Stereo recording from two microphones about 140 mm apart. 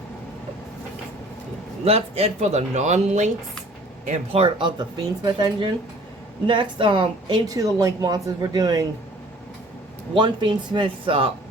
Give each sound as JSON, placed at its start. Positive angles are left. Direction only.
{"t": 1.8, "sound": "speech", "side_deg": -45}
{"t": 4.3, "sound": "a woman's voice", "side_deg": -40}
{"t": 10.2, "sound": "speech", "side_deg": -35}